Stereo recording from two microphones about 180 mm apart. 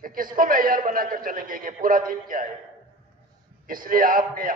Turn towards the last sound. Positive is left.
turn(degrees=-50)  # may be behind; listen again after turning